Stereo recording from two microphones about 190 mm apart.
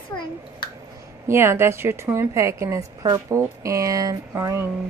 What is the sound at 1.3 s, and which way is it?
A woman's voice, 15° right (ahead or behind).